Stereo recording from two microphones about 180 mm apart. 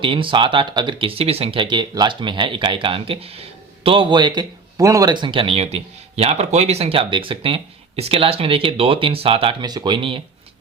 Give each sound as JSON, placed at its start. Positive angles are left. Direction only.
{"t": 0.0, "sound": "speech", "side_deg": -30}